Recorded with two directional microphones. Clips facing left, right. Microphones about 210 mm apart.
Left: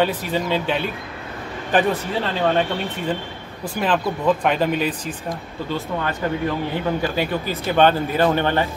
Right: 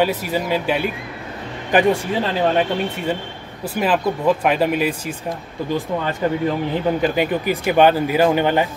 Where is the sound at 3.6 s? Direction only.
5° right (ahead or behind).